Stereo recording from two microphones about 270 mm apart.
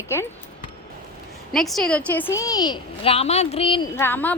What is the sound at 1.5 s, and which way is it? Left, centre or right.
A woman's voice, centre.